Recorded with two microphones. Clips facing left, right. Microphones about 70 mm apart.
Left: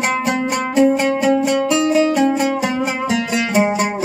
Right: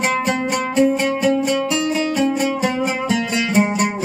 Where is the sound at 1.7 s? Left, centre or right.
Centre.